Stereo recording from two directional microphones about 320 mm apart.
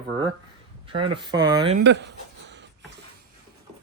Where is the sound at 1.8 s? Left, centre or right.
Right.